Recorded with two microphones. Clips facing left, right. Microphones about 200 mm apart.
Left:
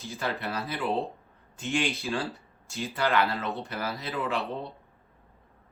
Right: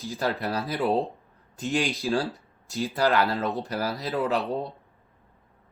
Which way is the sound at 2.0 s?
35° right (ahead or behind).